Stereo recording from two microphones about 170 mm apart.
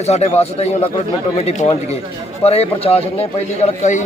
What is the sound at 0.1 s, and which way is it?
A man's voice, 40° left (ahead or behind).